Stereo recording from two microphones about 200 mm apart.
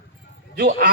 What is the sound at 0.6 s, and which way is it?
Speech, 55° right (ahead or behind).